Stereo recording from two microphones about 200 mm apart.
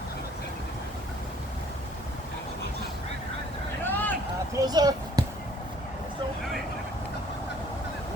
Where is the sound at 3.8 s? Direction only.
10° left (ahead or behind).